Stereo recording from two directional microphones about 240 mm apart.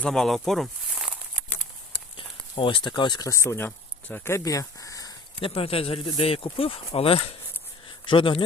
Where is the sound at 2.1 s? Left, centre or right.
Left.